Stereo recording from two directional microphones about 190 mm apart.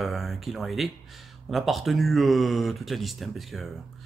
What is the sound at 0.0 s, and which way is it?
Speech, centre (ahead or behind).